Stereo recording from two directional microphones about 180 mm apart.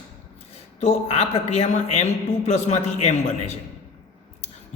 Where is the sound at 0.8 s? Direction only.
40° left (ahead or behind).